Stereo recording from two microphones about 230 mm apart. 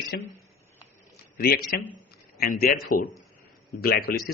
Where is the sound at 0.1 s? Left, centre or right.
Left.